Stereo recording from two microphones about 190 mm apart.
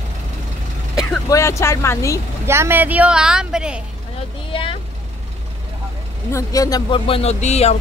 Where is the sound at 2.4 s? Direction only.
10° right (ahead or behind).